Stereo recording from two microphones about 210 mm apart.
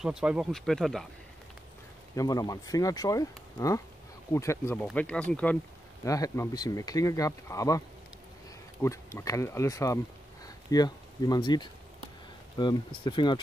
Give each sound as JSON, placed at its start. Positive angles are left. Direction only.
{"t": 0.0, "sound": "speech", "side_deg": -5}
{"t": 2.1, "sound": "speech", "side_deg": 15}
{"t": 8.8, "sound": "speech", "side_deg": 15}